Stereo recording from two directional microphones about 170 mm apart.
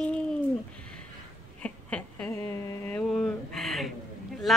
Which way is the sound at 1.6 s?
10° left (ahead or behind).